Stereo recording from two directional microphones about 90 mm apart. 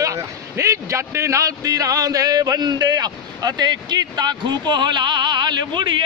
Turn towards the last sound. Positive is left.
turn(degrees=-60)  # may be behind; listen again after turning